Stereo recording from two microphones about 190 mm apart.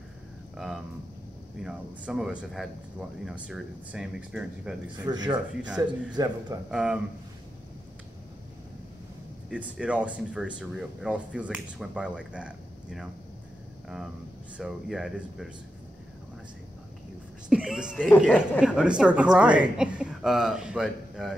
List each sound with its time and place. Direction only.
1.6 s speech: 5° right (ahead or behind)
4.9 s speech: 20° right (ahead or behind)
5.6 s speech: 5° right (ahead or behind)
6.1 s speech: 20° right (ahead or behind)
6.7 s speech: 5° right (ahead or behind)
9.5 s speech: 5° right (ahead or behind)
17.5 s speech: 5° right (ahead or behind)